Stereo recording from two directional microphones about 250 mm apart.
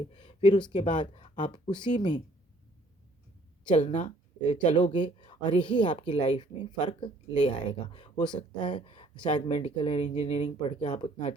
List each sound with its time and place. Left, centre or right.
0.1 s speech: left
3.7 s speech: left